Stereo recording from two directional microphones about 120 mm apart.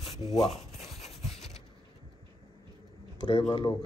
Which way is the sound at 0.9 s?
65° left (ahead or behind).